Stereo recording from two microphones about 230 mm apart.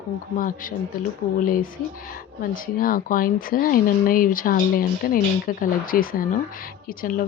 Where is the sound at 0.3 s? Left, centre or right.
Left.